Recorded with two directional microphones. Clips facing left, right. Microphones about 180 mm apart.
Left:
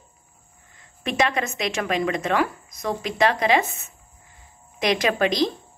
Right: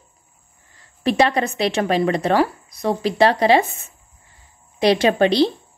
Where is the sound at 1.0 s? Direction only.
35° right (ahead or behind).